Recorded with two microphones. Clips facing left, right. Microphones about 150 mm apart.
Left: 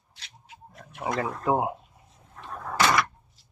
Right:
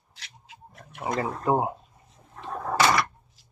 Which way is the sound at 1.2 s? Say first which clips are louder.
Right 1 dB; centre (ahead or behind).